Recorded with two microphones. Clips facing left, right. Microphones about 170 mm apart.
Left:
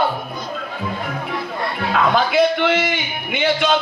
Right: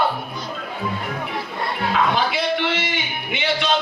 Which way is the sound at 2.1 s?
50° left (ahead or behind).